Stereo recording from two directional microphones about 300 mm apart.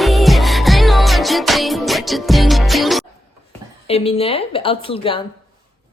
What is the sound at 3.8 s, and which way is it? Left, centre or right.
Speech, centre.